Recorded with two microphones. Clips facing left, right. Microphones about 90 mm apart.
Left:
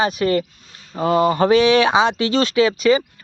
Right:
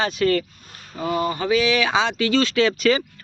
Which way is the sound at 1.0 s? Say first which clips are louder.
Left 7 dB; 40° left (ahead or behind).